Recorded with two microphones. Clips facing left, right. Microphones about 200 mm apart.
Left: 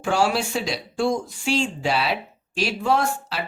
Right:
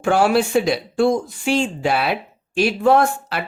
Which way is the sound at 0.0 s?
55° right (ahead or behind).